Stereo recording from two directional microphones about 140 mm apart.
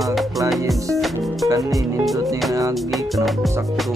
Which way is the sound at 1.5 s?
25° right (ahead or behind).